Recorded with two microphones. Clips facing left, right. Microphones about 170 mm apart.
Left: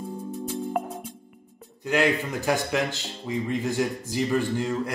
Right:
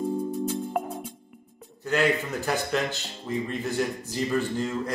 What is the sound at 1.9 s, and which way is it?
A man's voice, 15° left (ahead or behind).